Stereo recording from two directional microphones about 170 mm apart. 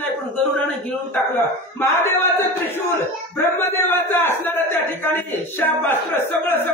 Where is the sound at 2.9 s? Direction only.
15° left (ahead or behind).